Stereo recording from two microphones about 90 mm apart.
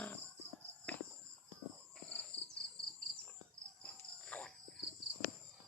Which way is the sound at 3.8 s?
15° left (ahead or behind).